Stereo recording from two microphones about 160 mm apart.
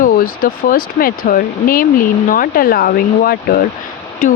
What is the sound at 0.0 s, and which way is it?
Speech, 60° left (ahead or behind).